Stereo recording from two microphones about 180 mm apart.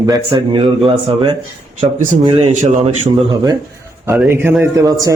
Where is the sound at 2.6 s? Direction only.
40° right (ahead or behind).